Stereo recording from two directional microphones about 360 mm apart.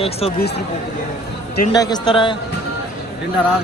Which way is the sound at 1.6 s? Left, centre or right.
Centre.